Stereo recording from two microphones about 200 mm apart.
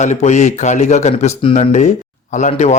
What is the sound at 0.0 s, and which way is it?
A man's voice, 35° left (ahead or behind).